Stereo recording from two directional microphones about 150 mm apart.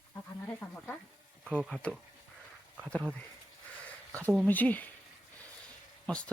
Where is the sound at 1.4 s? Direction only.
10° right (ahead or behind).